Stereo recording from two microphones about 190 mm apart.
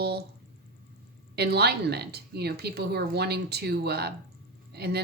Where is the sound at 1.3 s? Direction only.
60° right (ahead or behind).